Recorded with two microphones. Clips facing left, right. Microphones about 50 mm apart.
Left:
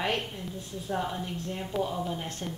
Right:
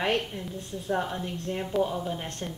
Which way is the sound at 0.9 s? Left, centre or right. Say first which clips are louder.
Right 2 dB; centre.